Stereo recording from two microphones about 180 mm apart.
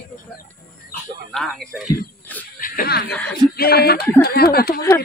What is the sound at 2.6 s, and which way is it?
Speech, 55° left (ahead or behind).